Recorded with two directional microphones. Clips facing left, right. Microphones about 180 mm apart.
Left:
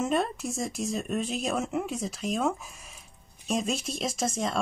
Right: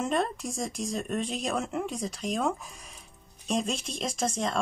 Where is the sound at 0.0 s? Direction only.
5° left (ahead or behind).